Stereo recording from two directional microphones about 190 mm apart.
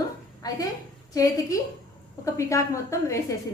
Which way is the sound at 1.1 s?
20° left (ahead or behind).